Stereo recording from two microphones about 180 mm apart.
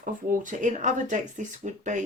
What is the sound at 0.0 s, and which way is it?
Speech, 45° right (ahead or behind).